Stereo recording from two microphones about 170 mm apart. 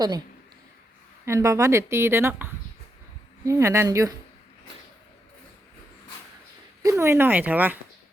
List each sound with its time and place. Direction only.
1.2 s a woman's voice: 15° right (ahead or behind)
6.8 s speech: 15° right (ahead or behind)